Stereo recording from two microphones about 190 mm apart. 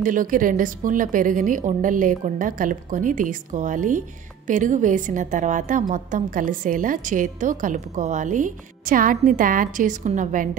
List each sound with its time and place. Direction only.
0.0 s a woman's voice: 45° right (ahead or behind)